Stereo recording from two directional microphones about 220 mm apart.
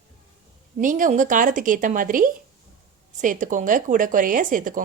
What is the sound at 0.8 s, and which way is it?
Speech, 35° right (ahead or behind).